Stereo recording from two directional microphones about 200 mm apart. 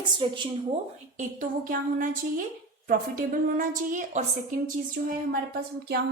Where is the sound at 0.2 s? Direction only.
25° right (ahead or behind).